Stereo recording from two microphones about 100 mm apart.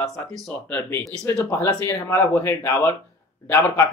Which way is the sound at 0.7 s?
20° left (ahead or behind).